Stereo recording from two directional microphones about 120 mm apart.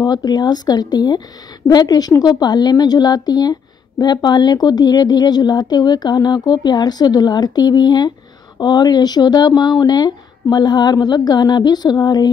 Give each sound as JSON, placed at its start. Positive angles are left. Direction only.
{"t": 0.0, "sound": "speech", "side_deg": 35}